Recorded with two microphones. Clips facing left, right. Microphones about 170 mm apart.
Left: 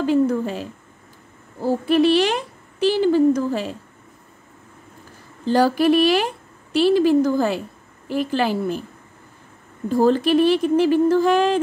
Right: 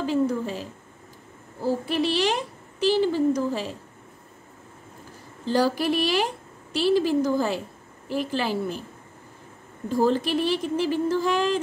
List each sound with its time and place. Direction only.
0.0 s speech: 60° left (ahead or behind)
1.9 s speech: 55° left (ahead or behind)
5.5 s speech: 55° left (ahead or behind)
10.0 s speech: 55° left (ahead or behind)